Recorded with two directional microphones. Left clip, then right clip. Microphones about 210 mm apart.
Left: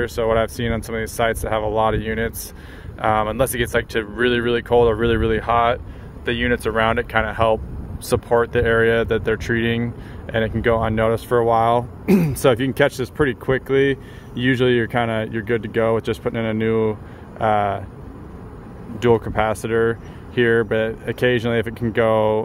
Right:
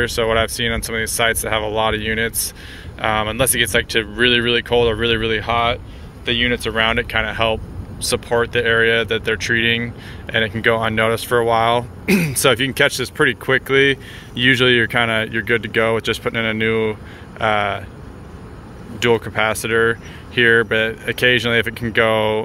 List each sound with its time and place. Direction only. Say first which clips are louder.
0.2 s speech: even; 15° left (ahead or behind)
19.3 s speech: right 2 dB; 15° left (ahead or behind)